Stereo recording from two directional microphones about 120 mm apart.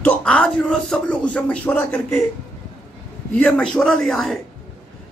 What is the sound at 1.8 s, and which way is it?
Speech, 20° left (ahead or behind).